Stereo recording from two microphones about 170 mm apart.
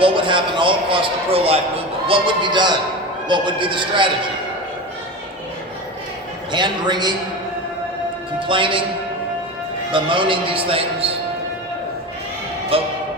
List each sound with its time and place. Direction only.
0.0 s a man's voice: 30° right (ahead or behind)
6.5 s a man's voice: 25° right (ahead or behind)
8.4 s a man's voice: 30° right (ahead or behind)
9.9 s a man's voice: 30° right (ahead or behind)
12.7 s a man's voice: 35° right (ahead or behind)